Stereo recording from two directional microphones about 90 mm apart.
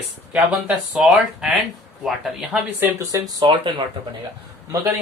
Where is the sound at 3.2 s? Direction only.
55° right (ahead or behind).